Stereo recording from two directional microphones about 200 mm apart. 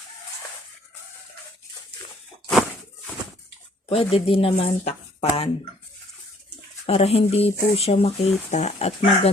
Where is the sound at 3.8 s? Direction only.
30° left (ahead or behind).